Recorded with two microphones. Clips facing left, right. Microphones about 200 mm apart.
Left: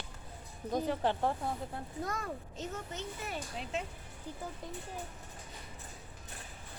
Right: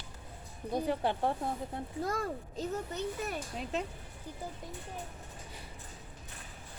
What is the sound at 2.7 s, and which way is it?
Speech, 40° right (ahead or behind).